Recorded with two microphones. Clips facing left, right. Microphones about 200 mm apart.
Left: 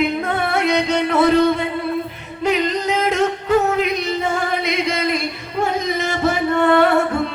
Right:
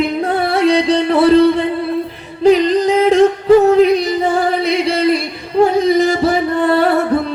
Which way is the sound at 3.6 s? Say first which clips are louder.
Right 9 dB; 35° right (ahead or behind).